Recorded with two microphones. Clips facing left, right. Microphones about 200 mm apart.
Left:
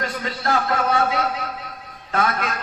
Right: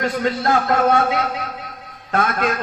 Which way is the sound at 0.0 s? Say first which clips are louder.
Right 6 dB; 55° right (ahead or behind).